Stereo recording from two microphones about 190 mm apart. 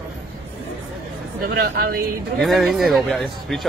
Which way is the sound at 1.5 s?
55° right (ahead or behind).